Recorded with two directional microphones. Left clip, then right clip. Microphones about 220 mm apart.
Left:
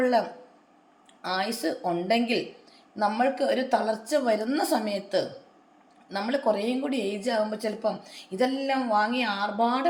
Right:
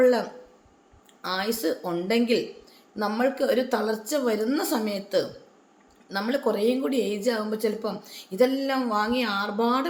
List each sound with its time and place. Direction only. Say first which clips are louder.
0.0 s a woman's voice: right 3 dB; 15° right (ahead or behind)